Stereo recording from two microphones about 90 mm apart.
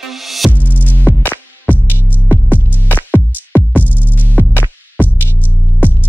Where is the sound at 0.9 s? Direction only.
20° left (ahead or behind).